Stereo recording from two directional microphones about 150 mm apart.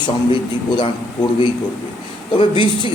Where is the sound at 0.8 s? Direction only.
35° left (ahead or behind).